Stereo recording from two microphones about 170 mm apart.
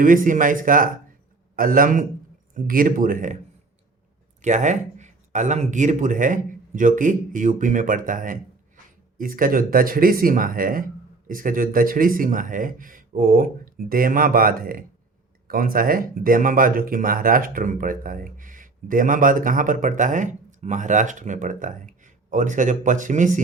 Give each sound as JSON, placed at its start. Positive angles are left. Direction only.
{"t": 0.0, "sound": "speech", "side_deg": -50}
{"t": 4.4, "sound": "speech", "side_deg": -45}